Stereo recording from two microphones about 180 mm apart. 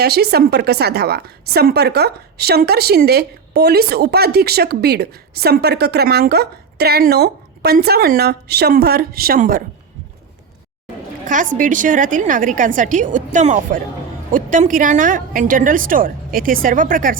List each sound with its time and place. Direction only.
0.0 s a woman's voice: 60° right (ahead or behind)
11.5 s a woman's voice: 45° right (ahead or behind)